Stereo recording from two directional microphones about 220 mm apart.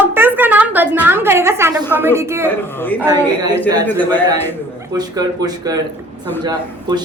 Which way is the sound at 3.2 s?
10° left (ahead or behind).